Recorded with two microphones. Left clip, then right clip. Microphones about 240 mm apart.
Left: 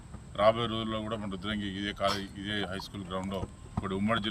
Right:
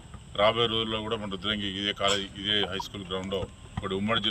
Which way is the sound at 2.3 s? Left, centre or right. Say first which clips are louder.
Right 7 dB; centre.